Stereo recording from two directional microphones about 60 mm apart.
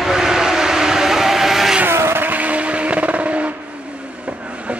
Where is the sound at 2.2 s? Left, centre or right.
Right.